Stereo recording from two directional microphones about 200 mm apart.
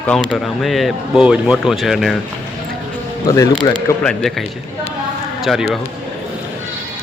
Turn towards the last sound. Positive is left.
turn(degrees=0)  # may be behind; listen again after turning